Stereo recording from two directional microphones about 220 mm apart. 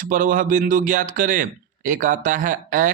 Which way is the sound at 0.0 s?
40° right (ahead or behind).